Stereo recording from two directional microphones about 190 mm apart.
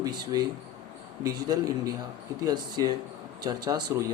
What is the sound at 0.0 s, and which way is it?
Speech, 20° right (ahead or behind).